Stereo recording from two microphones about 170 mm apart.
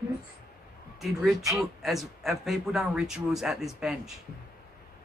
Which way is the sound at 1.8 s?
Centre (ahead or behind).